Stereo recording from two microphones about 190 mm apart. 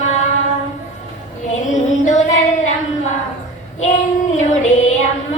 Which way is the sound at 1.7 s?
40° left (ahead or behind).